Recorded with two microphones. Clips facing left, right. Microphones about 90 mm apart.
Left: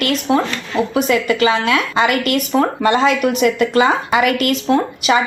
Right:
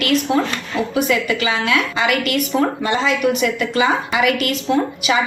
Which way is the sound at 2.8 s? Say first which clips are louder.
Left 4 dB; 55° left (ahead or behind).